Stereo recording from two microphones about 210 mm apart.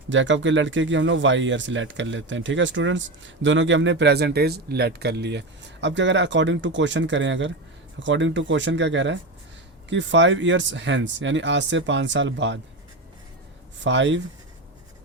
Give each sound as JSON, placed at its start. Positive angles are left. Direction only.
{"t": 0.1, "sound": "speech", "side_deg": -60}
{"t": 13.8, "sound": "speech", "side_deg": -60}